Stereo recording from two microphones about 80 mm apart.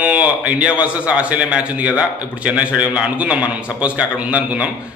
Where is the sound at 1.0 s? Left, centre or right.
Centre.